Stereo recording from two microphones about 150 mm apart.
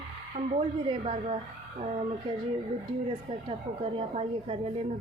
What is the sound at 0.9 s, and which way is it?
Speech, 35° right (ahead or behind).